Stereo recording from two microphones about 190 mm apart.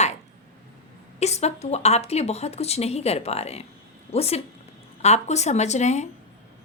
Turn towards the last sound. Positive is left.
turn(degrees=35)  # may be behind; listen again after turning